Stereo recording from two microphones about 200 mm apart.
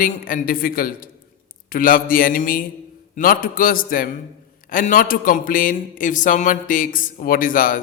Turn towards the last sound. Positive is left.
turn(degrees=45)  # may be behind; listen again after turning